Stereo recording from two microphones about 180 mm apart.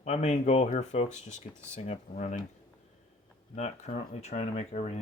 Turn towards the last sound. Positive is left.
turn(degrees=40)  # may be behind; listen again after turning